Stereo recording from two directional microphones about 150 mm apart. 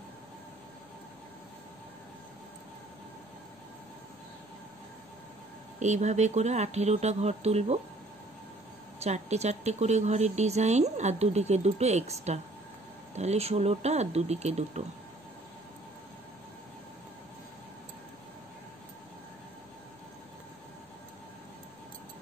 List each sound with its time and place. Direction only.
5.8 s a woman's voice: 50° right (ahead or behind)
9.0 s a woman's voice: 45° right (ahead or behind)